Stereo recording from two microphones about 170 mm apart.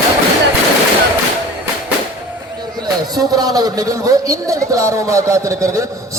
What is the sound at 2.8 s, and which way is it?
Speech, 20° right (ahead or behind).